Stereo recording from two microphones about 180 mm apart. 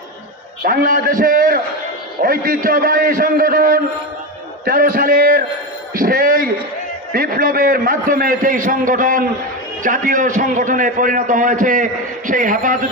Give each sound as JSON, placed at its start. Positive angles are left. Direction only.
{"t": 0.6, "sound": "a man's voice", "side_deg": -55}
{"t": 5.9, "sound": "a sound", "side_deg": -55}
{"t": 7.1, "sound": "a man's voice", "side_deg": -55}